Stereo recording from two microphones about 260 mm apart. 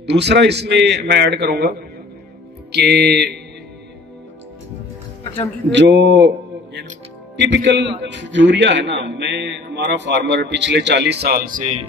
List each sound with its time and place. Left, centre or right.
0.0 s a man's voice: right
5.7 s a man's voice: right